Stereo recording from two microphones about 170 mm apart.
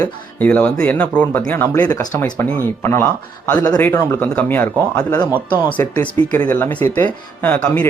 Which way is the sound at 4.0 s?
10° left (ahead or behind).